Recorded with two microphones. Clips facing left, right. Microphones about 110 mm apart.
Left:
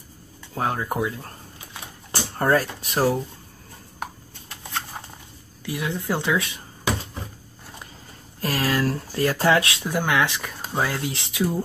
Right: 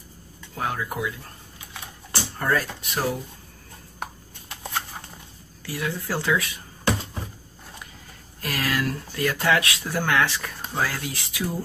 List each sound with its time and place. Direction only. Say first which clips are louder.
0.6 s speech: left 3 dB; 35° left (ahead or behind)
2.1 s speech: left 4 dB; 40° left (ahead or behind)
5.7 s speech: left 2 dB; 20° left (ahead or behind)
8.4 s speech: left 3 dB; 35° left (ahead or behind)
9.8 s speech: right 2 dB; 15° left (ahead or behind)